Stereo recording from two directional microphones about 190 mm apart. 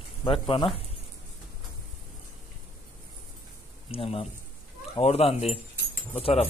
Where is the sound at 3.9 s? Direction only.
30° left (ahead or behind).